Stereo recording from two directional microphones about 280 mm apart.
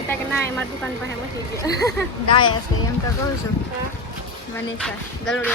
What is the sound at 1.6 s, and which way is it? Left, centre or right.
Speech, centre.